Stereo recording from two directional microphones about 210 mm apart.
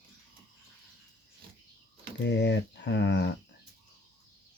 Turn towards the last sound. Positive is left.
turn(degrees=55)  # may be behind; listen again after turning